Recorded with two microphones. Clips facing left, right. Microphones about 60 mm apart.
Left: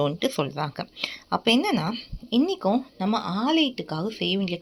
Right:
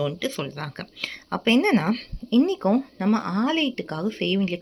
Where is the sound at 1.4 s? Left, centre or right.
Right.